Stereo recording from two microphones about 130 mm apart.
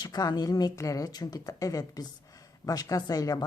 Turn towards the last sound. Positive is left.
turn(degrees=30)  # may be behind; listen again after turning